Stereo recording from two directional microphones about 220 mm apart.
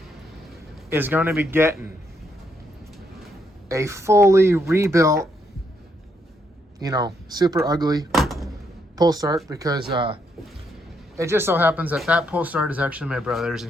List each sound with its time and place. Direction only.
0.9 s speech: 10° right (ahead or behind)
3.7 s speech: 15° right (ahead or behind)
6.7 s speech: 15° right (ahead or behind)
8.1 s door: centre (ahead or behind)
9.0 s speech: 15° right (ahead or behind)
11.2 s speech: 10° right (ahead or behind)